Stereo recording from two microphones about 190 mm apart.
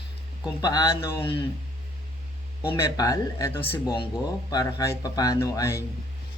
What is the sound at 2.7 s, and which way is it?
Speech, 20° left (ahead or behind).